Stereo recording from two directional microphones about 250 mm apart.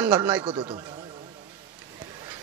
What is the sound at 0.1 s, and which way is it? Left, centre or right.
Speech, centre.